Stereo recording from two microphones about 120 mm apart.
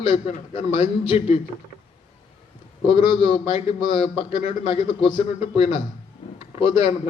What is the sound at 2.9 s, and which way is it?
A man's voice, 45° left (ahead or behind).